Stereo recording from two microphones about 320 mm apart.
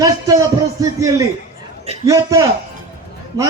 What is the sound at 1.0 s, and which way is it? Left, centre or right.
A man's voice, centre.